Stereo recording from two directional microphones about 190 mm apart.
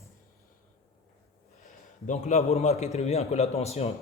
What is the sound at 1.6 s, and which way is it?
Speech, 40° left (ahead or behind).